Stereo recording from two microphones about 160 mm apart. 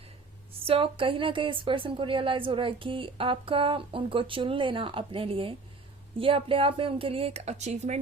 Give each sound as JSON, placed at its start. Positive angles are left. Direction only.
{"t": 0.7, "sound": "a woman's voice", "side_deg": -35}